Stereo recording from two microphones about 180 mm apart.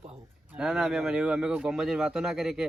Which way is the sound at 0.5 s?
Centre (ahead or behind).